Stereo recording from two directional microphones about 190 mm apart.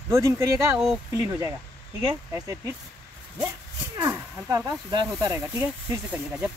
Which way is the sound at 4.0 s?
15° right (ahead or behind).